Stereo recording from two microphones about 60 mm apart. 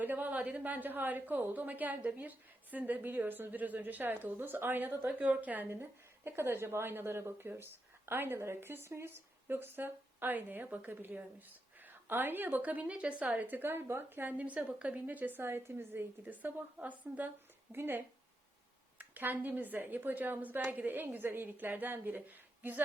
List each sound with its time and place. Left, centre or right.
0.0 s a woman's voice: right
14.3 s a woman's voice: right
17.7 s a woman's voice: right